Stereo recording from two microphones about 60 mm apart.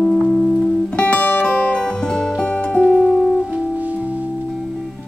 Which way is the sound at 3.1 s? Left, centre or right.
Centre.